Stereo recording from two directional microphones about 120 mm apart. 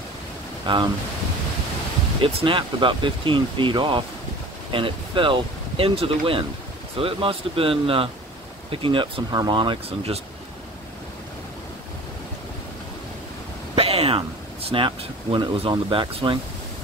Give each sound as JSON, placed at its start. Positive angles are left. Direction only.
{"t": 0.7, "sound": "speech", "side_deg": -45}
{"t": 2.2, "sound": "speech", "side_deg": -45}
{"t": 13.7, "sound": "a sound", "side_deg": -55}
{"t": 14.9, "sound": "speech", "side_deg": -40}